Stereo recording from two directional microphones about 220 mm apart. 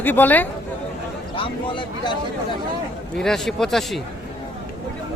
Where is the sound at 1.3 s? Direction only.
25° left (ahead or behind).